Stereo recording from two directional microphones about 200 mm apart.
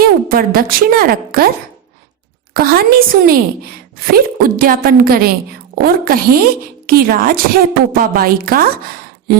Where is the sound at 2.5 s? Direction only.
50° right (ahead or behind).